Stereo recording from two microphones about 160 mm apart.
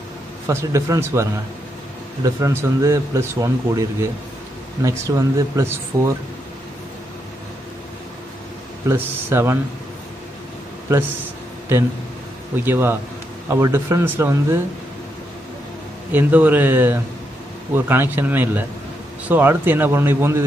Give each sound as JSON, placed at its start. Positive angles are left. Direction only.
{"t": 0.5, "sound": "speech", "side_deg": -20}
{"t": 8.8, "sound": "speech", "side_deg": -15}
{"t": 12.5, "sound": "speech", "side_deg": -15}
{"t": 16.1, "sound": "speech", "side_deg": -10}